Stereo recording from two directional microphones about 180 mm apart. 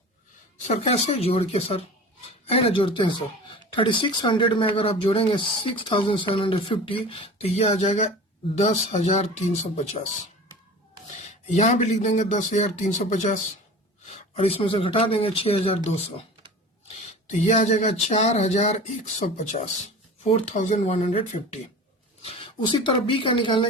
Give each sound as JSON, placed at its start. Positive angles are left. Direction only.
{"t": 0.7, "sound": "speech", "side_deg": 35}
{"t": 11.1, "sound": "speech", "side_deg": 40}